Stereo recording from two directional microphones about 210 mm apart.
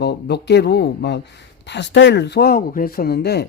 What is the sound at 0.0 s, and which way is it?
Speech, 55° left (ahead or behind).